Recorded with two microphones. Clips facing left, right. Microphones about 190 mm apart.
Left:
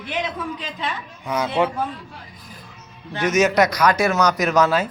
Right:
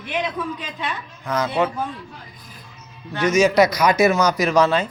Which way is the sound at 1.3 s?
10° left (ahead or behind).